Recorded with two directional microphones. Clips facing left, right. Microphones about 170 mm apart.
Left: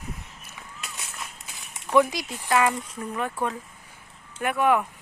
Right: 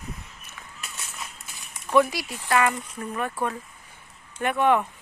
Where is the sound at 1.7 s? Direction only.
15° left (ahead or behind).